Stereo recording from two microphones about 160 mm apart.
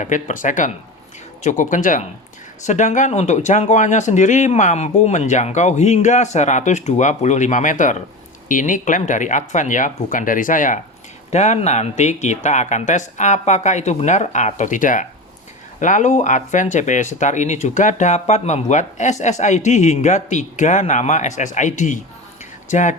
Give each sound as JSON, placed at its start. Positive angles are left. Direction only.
{"t": 0.0, "sound": "speech", "side_deg": 50}
{"t": 11.3, "sound": "speech", "side_deg": 45}